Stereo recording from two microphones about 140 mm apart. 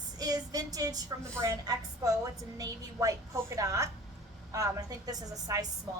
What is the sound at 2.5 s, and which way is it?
A woman's voice, 25° right (ahead or behind).